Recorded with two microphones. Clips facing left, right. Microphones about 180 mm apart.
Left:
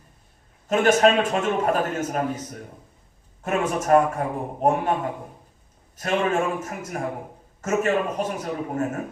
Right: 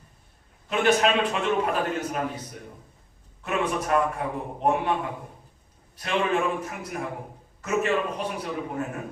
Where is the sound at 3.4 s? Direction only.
45° left (ahead or behind).